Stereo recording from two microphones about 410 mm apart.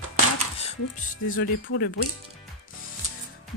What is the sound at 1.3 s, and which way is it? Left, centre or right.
Speech, left.